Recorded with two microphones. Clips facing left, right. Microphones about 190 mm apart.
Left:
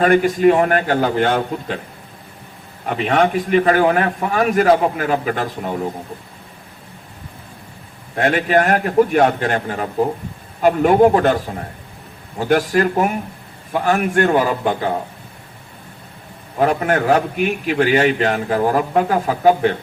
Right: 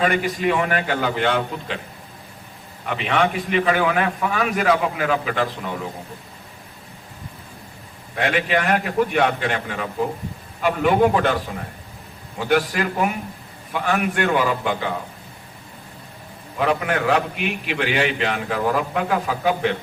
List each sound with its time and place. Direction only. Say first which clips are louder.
0.0 s a man's voice: left 8 dB; 45° left (ahead or behind)
2.8 s a man's voice: left 4 dB; 45° left (ahead or behind)
8.1 s a man's voice: left 5 dB; 45° left (ahead or behind)
12.4 s a man's voice: left 5 dB; 45° left (ahead or behind)
16.6 s a man's voice: left 4 dB; 45° left (ahead or behind)